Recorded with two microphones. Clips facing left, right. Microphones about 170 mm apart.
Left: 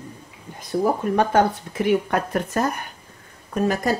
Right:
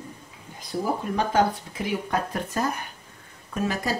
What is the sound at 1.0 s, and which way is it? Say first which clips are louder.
Speech: left 2 dB; 55° left (ahead or behind).